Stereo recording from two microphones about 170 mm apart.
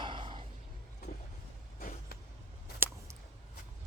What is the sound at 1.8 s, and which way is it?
Vehicle, 55° left (ahead or behind).